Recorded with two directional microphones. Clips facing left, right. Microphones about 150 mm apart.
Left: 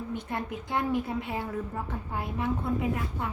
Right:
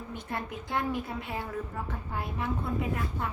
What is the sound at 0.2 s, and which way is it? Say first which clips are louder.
A woman's voice: left 2 dB; 20° left (ahead or behind).